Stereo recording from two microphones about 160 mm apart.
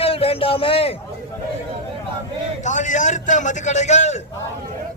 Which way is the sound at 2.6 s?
50° left (ahead or behind).